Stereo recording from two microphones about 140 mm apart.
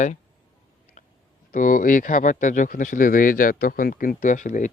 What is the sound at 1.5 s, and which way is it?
Speech, 70° left (ahead or behind).